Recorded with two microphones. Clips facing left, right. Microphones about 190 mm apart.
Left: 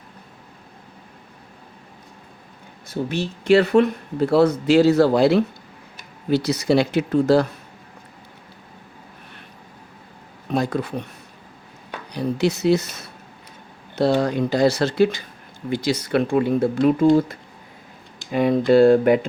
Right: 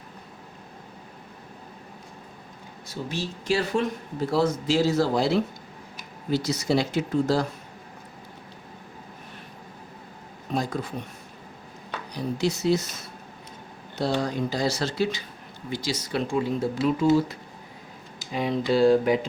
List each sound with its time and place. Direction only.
2.9 s speech: 60° left (ahead or behind)
10.5 s speech: 65° left (ahead or behind)
12.1 s speech: 65° left (ahead or behind)
18.3 s speech: 55° left (ahead or behind)